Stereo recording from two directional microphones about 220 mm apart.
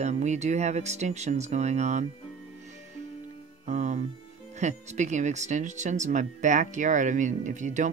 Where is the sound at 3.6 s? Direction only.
35° right (ahead or behind).